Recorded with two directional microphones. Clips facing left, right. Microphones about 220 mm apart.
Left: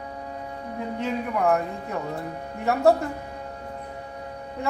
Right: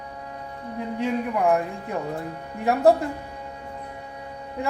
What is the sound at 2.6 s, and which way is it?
Speech, 15° right (ahead or behind).